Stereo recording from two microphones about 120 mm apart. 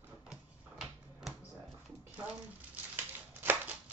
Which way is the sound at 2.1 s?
10° right (ahead or behind).